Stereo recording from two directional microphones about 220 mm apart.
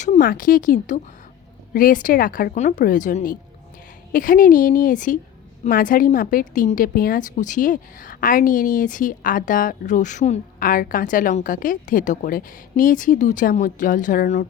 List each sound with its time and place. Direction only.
0.0 s a woman's voice: 35° left (ahead or behind)